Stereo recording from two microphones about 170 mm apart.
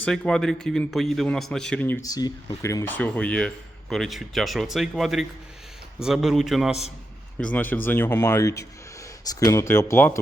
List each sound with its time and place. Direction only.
0.0 s speech: 5° left (ahead or behind)
2.0 s speech: 20° left (ahead or behind); by 6.7 s centre (ahead or behind)
7.3 s speech: 10° left (ahead or behind)